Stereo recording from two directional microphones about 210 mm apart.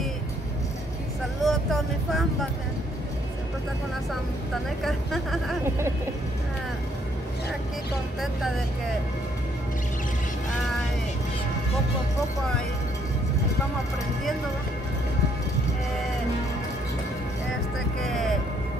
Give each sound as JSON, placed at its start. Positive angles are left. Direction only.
{"t": 1.4, "sound": "vehicle", "side_deg": 0}
{"t": 4.8, "sound": "speech", "side_deg": 0}
{"t": 8.2, "sound": "speech", "side_deg": 0}
{"t": 18.0, "sound": "music", "side_deg": 0}